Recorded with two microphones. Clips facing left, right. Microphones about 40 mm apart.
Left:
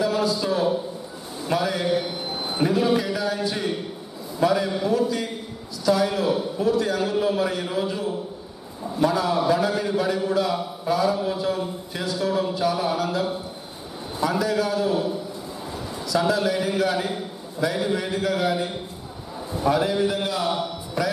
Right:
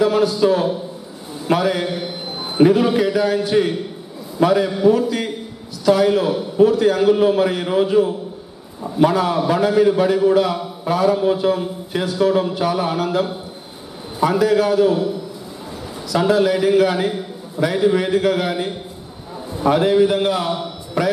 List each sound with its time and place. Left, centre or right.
0.0 s a man's voice: right
14.4 s a man's voice: right
16.1 s a man's voice: right
19.7 s a man's voice: right